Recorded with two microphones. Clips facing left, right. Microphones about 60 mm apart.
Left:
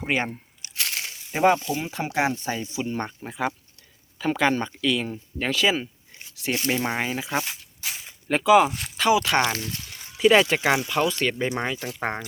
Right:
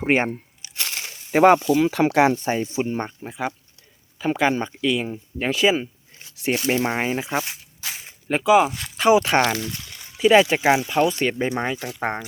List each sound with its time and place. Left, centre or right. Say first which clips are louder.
0.0 s speech: right 5 dB; right
1.3 s speech: right 6 dB; right
1.7 s speech: right 9 dB; right
2.4 s speech: right 5 dB; right
3.0 s speech: even; centre; by 6.7 s right
6.7 s speech: right 4 dB; centre
7.0 s speech: right 4 dB; right
8.0 s zipper: right 1 dB; centre
9.1 s speech: right 4 dB; right
10.2 s speech: right 2 dB; centre
10.4 s speech: right 3 dB; centre